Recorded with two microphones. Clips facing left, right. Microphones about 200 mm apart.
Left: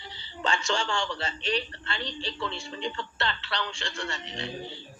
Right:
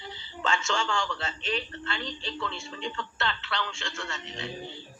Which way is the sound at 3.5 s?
Centre (ahead or behind).